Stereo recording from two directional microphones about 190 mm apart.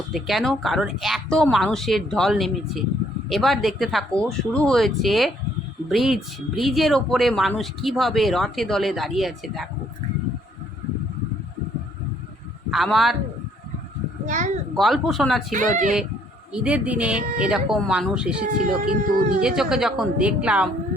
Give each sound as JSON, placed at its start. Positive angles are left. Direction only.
{"t": 0.1, "sound": "speech", "side_deg": 0}
{"t": 12.7, "sound": "speech", "side_deg": 0}
{"t": 14.3, "sound": "speech", "side_deg": -40}
{"t": 14.8, "sound": "speech", "side_deg": 0}
{"t": 15.5, "sound": "speech", "side_deg": -40}
{"t": 16.5, "sound": "a woman's voice", "side_deg": -5}
{"t": 18.4, "sound": "speech", "side_deg": -45}
{"t": 19.4, "sound": "speech", "side_deg": -5}